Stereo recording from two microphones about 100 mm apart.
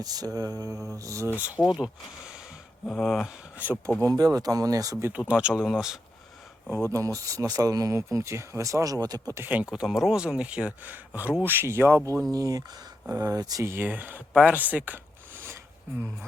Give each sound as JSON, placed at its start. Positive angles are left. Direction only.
{"t": 0.0, "sound": "speech", "side_deg": -40}
{"t": 1.4, "sound": "speech", "side_deg": -15}
{"t": 1.6, "sound": "speech", "side_deg": -5}
{"t": 3.5, "sound": "speech", "side_deg": -15}
{"t": 4.0, "sound": "speech", "side_deg": -35}
{"t": 5.3, "sound": "speech", "side_deg": -10}
{"t": 6.7, "sound": "speech", "side_deg": -25}
{"t": 9.3, "sound": "speech", "side_deg": -20}
{"t": 9.7, "sound": "speech", "side_deg": -5}
{"t": 12.3, "sound": "speech", "side_deg": -35}
{"t": 13.7, "sound": "speech", "side_deg": -20}